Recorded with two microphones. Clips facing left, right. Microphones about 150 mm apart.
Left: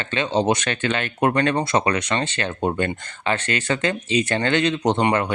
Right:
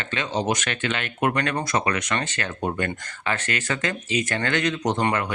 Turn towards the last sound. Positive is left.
turn(degrees=30)  # may be behind; listen again after turning